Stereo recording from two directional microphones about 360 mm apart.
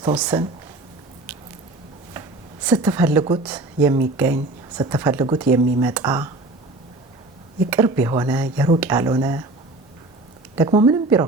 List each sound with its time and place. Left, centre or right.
0.0 s speech: centre
2.6 s speech: centre
7.7 s speech: centre
10.5 s speech: centre